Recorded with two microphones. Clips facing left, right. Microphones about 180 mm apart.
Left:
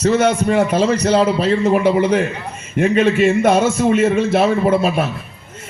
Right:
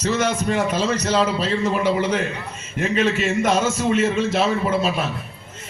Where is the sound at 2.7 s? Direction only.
55° left (ahead or behind).